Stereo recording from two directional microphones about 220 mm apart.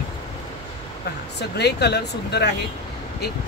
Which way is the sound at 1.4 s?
50° left (ahead or behind).